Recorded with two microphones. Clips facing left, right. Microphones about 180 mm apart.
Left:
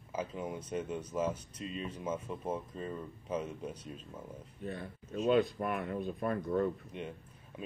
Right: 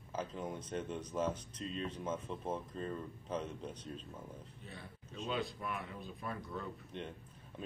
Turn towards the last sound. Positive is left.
turn(degrees=5)  # may be behind; listen again after turning